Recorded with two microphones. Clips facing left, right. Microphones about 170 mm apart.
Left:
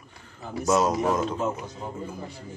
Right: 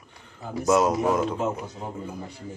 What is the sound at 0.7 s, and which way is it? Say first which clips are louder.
Speech: right 2 dB; 10° right (ahead or behind).